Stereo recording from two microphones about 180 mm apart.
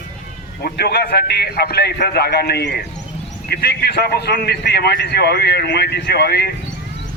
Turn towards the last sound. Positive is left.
turn(degrees=60)  # may be behind; listen again after turning